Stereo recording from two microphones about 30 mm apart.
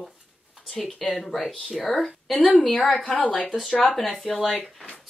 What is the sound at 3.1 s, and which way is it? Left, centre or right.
Speech, left.